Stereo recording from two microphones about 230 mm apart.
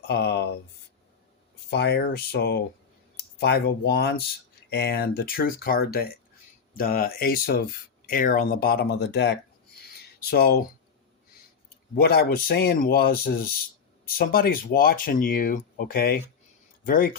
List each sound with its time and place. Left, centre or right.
0.1 s speech: left
1.7 s speech: left
10.0 s a sound: left
11.9 s speech: left